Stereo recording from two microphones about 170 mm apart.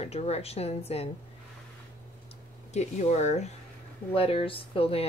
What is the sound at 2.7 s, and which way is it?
Speech, 45° left (ahead or behind).